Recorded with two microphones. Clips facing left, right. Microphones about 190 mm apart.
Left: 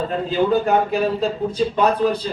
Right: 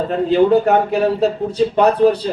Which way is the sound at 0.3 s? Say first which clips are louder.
Right 5 dB; 65° right (ahead or behind).